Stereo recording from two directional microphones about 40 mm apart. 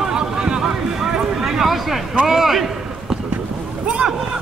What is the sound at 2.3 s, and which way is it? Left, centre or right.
Speech, centre.